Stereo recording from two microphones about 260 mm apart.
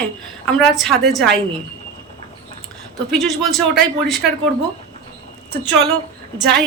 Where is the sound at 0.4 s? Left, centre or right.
Centre.